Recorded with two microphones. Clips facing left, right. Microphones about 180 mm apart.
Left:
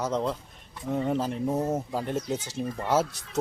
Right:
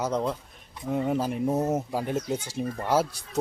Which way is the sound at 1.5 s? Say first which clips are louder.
Right 2 dB; 20° right (ahead or behind).